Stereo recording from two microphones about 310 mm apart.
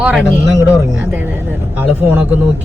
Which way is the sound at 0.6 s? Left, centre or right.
Centre.